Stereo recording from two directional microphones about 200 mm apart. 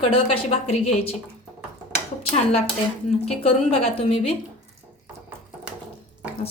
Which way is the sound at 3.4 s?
30° left (ahead or behind).